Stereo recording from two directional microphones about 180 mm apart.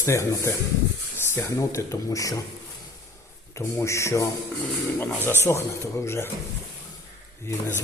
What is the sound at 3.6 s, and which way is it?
Speech, 15° left (ahead or behind).